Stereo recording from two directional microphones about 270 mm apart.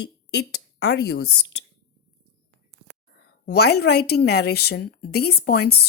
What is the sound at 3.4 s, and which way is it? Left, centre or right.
A woman's voice, left.